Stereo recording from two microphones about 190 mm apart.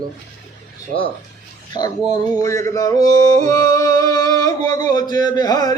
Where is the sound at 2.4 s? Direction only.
15° left (ahead or behind).